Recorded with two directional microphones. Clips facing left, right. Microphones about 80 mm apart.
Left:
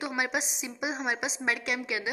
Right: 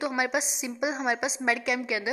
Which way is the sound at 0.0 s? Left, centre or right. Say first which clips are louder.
Right 3 dB; right.